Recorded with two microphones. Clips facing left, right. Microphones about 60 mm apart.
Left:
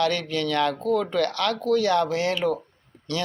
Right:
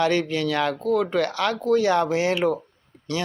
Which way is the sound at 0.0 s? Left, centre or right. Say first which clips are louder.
Right 2 dB; centre.